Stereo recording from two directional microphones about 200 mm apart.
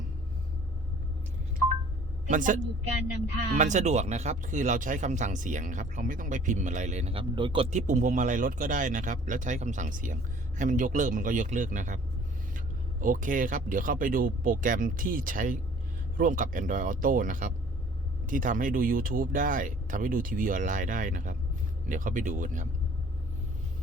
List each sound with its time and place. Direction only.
2.3 s speech: 40° right (ahead or behind)